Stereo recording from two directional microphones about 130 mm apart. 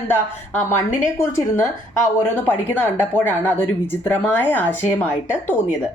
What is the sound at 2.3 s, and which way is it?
A woman's voice, 15° left (ahead or behind).